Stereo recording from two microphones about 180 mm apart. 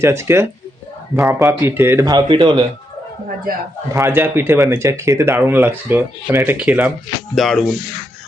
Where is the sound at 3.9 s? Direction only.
10° right (ahead or behind).